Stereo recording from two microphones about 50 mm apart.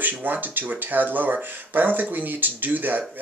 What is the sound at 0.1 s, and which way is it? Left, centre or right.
Speech, right.